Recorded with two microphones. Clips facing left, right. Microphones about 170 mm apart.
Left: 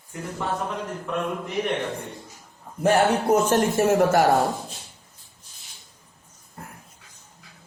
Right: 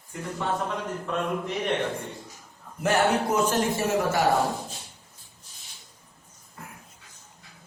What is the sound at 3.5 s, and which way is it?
Speech, 55° left (ahead or behind).